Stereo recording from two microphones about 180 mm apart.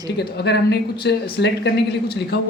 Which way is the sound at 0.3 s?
70° left (ahead or behind).